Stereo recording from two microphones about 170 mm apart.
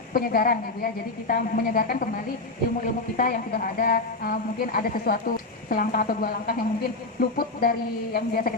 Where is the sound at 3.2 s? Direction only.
55° left (ahead or behind).